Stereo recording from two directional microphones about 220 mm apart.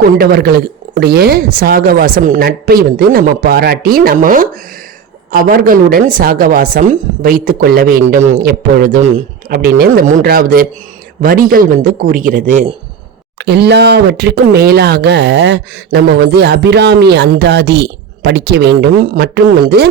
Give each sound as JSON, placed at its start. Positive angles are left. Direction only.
{"t": 0.2, "sound": "a woman's voice", "side_deg": -45}
{"t": 13.4, "sound": "speech", "side_deg": -50}